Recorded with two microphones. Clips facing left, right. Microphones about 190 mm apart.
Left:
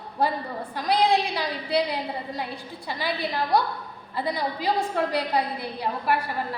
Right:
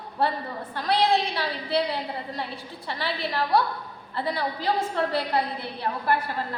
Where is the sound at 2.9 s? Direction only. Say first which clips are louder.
Left 1 dB; 15° left (ahead or behind).